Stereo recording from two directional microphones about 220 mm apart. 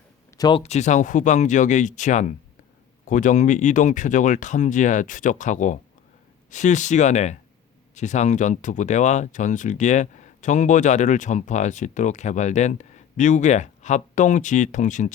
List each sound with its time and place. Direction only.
0.3 s speech: 20° left (ahead or behind)